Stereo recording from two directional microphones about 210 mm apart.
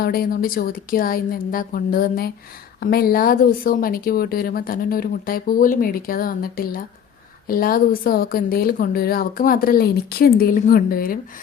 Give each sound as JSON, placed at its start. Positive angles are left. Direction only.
{"t": 0.0, "sound": "speech", "side_deg": 45}